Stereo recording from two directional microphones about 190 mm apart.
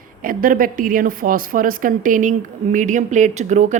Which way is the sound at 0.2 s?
45° right (ahead or behind).